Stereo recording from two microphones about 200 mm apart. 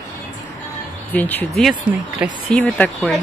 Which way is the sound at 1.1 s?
10° left (ahead or behind).